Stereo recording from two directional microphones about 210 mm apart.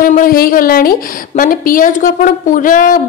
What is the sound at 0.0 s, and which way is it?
A woman's voice, 40° left (ahead or behind).